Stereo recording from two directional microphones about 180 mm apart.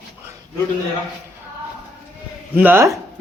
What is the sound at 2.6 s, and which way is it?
Speech, 10° right (ahead or behind).